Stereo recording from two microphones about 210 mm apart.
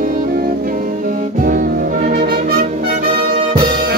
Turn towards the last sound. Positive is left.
turn(degrees=-40)  # may be behind; listen again after turning